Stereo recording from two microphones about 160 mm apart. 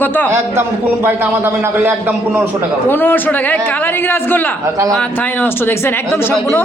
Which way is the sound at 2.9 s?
10° left (ahead or behind).